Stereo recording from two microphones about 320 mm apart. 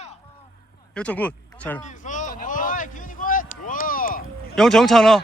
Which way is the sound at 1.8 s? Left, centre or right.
Left.